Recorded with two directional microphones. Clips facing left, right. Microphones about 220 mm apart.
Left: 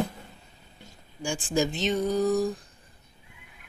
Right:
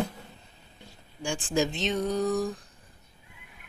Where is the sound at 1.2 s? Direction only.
Centre (ahead or behind).